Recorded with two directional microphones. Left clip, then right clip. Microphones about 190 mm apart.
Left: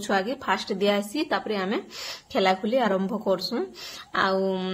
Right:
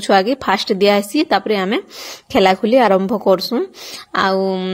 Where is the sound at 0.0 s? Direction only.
40° right (ahead or behind).